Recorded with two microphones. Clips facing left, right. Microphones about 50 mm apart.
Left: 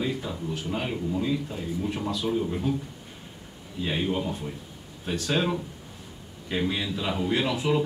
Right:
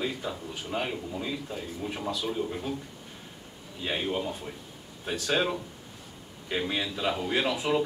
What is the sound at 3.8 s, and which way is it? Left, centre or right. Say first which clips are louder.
Speech: left 3 dB; centre.